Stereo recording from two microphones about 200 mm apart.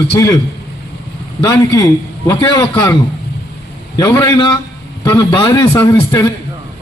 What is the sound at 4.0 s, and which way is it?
Speech, 15° left (ahead or behind).